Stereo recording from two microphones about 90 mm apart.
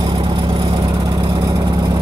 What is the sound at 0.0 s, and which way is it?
Vehicle, 65° right (ahead or behind).